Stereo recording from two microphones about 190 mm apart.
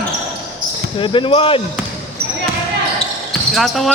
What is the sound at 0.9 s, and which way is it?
Speech, 25° left (ahead or behind).